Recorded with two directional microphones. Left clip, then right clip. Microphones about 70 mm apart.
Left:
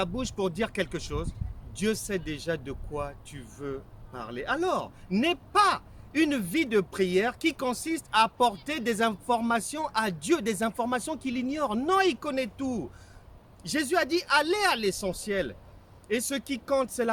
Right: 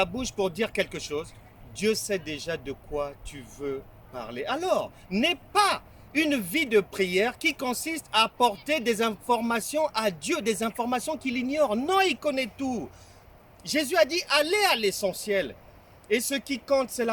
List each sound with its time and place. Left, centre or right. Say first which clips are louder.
0.0 s speech: right 3 dB; left
11.9 s speech: left 2 dB; left
12.2 s speech: right 3 dB; left